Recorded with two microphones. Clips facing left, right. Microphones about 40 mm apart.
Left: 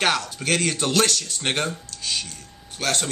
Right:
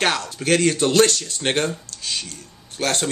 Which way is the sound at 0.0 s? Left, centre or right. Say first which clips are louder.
Right 1 dB; centre.